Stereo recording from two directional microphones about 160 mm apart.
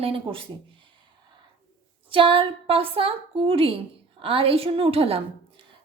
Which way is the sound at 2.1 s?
35° right (ahead or behind).